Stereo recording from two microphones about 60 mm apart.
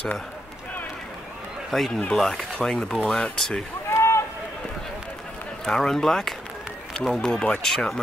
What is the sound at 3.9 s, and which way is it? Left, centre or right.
Run, left.